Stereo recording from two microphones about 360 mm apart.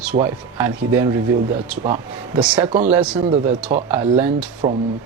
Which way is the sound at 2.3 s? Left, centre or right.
Centre.